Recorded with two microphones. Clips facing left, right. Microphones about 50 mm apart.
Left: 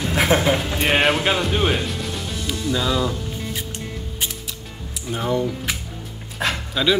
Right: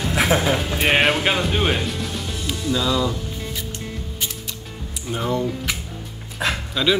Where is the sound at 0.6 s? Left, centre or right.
Centre.